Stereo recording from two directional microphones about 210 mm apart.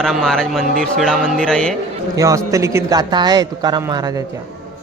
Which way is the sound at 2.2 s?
15° right (ahead or behind).